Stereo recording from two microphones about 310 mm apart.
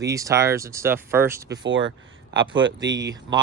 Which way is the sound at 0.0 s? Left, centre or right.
Centre.